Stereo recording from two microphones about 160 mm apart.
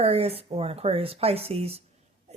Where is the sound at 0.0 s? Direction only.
40° right (ahead or behind).